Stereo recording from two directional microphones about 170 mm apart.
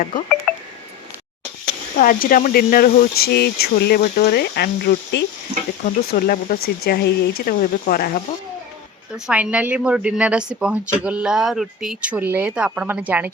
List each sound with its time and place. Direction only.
0.5 s telephone dialing: centre (ahead or behind)
2.0 s speech: 55° left (ahead or behind)
9.1 s speech: 5° right (ahead or behind)